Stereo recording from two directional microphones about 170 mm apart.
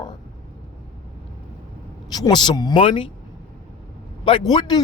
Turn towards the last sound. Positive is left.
turn(degrees=25)  # may be behind; listen again after turning